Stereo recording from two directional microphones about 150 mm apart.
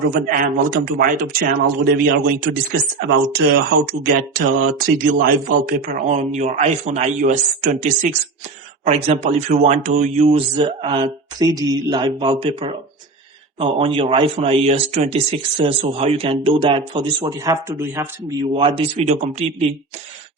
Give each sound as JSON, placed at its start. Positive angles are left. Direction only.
{"t": 0.1, "sound": "a man's voice", "side_deg": -65}
{"t": 8.8, "sound": "speech", "side_deg": -45}
{"t": 17.4, "sound": "a man's voice", "side_deg": -20}
{"t": 18.5, "sound": "speech", "side_deg": -35}
{"t": 19.0, "sound": "a man's voice", "side_deg": -50}